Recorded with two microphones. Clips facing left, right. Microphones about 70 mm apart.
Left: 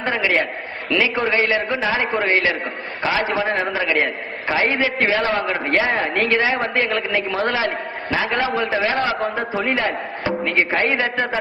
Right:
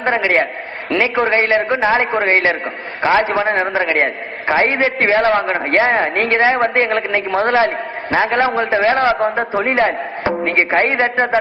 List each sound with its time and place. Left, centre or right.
0.0 s a man's voice: right
3.1 s a man's voice: right